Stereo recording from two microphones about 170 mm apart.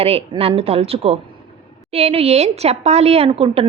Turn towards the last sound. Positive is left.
turn(degrees=-35)  # may be behind; listen again after turning